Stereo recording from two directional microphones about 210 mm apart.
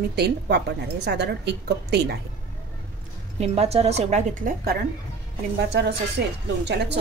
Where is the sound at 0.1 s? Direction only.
50° right (ahead or behind).